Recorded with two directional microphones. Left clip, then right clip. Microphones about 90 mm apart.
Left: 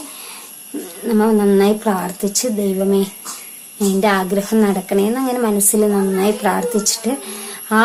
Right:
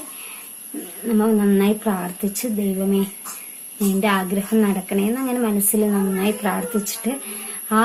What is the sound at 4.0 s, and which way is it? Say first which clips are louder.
A woman's voice: left 5 dB; 30° left (ahead or behind).